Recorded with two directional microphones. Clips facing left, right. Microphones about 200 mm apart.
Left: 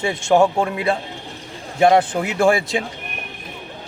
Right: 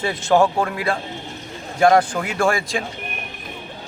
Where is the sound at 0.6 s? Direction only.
20° left (ahead or behind).